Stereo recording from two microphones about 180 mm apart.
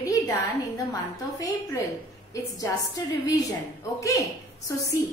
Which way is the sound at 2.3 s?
20° left (ahead or behind).